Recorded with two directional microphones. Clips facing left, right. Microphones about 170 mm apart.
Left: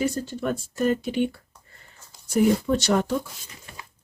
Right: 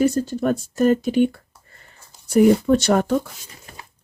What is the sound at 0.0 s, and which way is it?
Speech, 45° right (ahead or behind).